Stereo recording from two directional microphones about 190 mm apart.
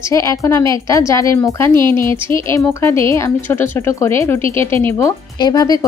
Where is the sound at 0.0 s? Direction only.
15° left (ahead or behind).